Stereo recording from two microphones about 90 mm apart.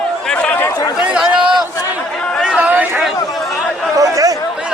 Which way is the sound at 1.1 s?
10° right (ahead or behind).